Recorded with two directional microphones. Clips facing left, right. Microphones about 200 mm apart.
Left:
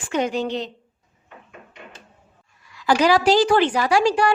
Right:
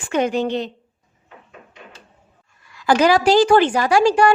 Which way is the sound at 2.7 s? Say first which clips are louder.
Right 2 dB; 50° right (ahead or behind).